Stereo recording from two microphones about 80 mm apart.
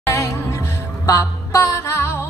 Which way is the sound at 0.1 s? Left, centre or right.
Left.